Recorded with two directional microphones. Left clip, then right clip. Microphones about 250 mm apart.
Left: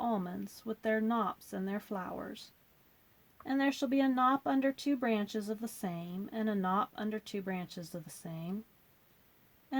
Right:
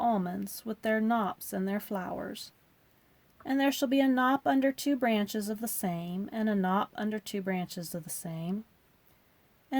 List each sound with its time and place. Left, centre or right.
0.0 s speech: right
3.4 s speech: right